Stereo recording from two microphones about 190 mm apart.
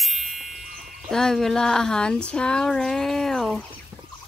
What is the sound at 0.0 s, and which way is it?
Wind chime, centre (ahead or behind).